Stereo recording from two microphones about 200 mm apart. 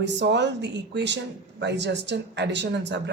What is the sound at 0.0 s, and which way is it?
A woman's voice, 60° right (ahead or behind).